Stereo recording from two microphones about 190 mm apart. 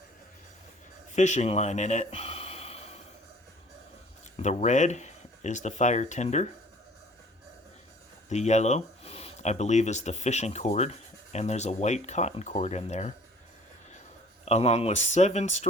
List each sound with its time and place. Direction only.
1.1 s gasp: 40° left (ahead or behind)
4.4 s speech: 40° left (ahead or behind)
8.3 s speech: 35° left (ahead or behind)
14.4 s speech: 35° left (ahead or behind)